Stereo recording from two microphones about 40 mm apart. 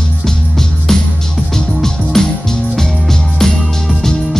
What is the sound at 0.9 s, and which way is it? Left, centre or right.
Music, centre.